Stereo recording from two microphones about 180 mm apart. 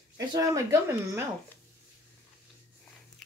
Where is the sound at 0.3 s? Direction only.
20° right (ahead or behind).